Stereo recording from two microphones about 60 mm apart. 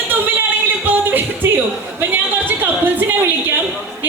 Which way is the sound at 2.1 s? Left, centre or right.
Right.